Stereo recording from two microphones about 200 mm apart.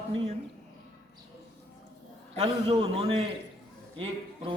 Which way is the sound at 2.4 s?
25° right (ahead or behind).